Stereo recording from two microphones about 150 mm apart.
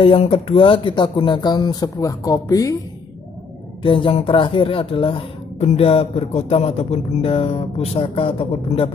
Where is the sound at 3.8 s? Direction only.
35° left (ahead or behind).